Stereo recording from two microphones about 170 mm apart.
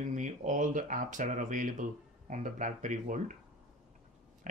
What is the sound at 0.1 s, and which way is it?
Speech, 45° right (ahead or behind).